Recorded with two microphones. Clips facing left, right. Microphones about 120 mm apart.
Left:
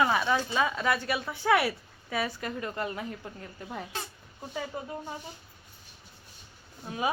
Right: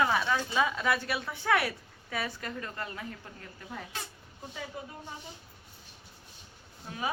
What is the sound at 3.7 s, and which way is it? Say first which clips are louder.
Speech: left 3 dB; 30° left (ahead or behind).